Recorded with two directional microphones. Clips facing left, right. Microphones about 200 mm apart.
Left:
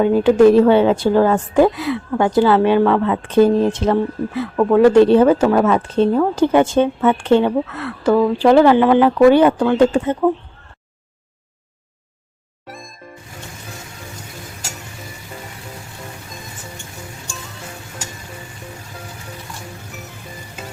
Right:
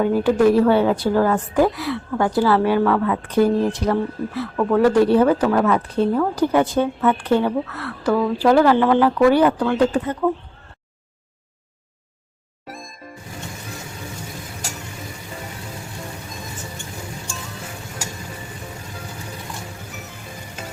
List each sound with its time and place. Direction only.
0.0 s speech: 20° left (ahead or behind)
12.6 s music: centre (ahead or behind)